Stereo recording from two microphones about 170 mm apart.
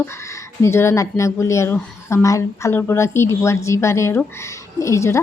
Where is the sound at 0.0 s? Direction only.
15° left (ahead or behind).